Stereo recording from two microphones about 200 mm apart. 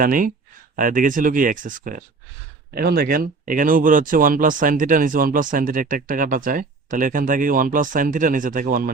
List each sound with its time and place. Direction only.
0.0 s speech: 45° right (ahead or behind)